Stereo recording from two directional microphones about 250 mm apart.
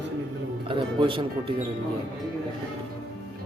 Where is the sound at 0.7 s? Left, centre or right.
Right.